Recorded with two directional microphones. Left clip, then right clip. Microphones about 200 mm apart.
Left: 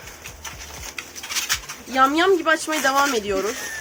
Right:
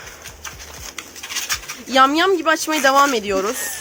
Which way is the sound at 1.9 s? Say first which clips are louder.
Right 3 dB; 45° right (ahead or behind).